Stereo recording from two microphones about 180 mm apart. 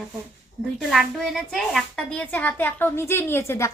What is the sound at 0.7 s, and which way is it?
A woman's voice, centre (ahead or behind).